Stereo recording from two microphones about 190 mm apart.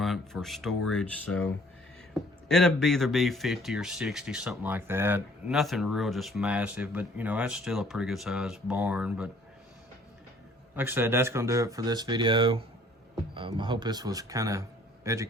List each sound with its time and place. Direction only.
0.0 s speech: centre (ahead or behind)
2.5 s speech: centre (ahead or behind)
10.8 s a man's voice: 10° right (ahead or behind)